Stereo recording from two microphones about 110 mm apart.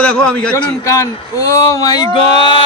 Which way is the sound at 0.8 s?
30° left (ahead or behind).